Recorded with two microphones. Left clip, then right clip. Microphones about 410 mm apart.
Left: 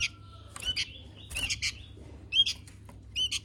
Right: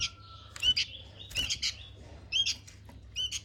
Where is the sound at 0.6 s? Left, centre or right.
Centre.